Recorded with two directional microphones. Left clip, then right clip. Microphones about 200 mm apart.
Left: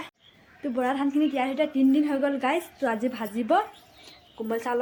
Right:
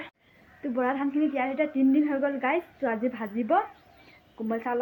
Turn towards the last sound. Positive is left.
turn(degrees=15)  # may be behind; listen again after turning